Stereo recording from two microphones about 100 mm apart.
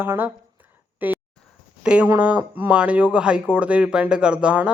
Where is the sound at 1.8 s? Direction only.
10° right (ahead or behind).